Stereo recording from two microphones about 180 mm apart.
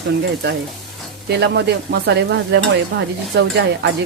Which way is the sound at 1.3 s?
70° right (ahead or behind).